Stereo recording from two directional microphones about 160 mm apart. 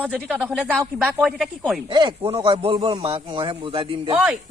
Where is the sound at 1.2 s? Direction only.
Centre (ahead or behind).